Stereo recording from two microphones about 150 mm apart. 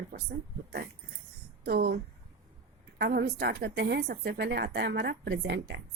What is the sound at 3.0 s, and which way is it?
Speech, 90° right.